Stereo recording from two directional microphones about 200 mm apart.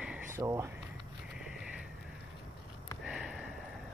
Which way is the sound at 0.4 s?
15° right (ahead or behind).